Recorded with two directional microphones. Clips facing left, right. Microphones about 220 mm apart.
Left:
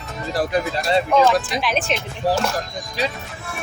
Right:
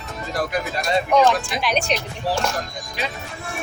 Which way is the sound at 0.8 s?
30° left (ahead or behind).